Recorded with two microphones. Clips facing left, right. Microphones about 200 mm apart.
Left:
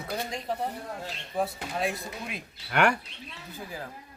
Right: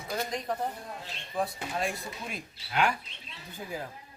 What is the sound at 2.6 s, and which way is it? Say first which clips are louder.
Speech: left 4 dB; 70° left (ahead or behind).